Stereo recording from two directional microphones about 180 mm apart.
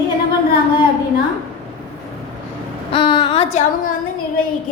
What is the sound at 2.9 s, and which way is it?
Speech, 30° left (ahead or behind).